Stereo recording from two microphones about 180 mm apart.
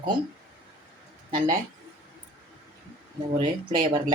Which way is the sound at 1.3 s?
25° right (ahead or behind).